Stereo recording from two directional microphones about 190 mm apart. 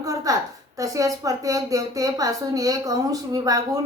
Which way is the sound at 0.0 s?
15° right (ahead or behind).